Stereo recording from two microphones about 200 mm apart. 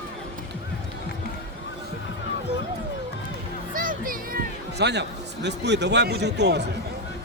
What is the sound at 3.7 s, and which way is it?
Music, 45° right (ahead or behind).